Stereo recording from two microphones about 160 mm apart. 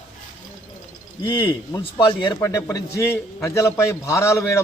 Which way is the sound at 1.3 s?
30° left (ahead or behind).